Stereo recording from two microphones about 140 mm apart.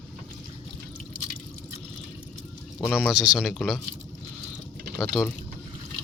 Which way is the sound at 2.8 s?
Centre (ahead or behind).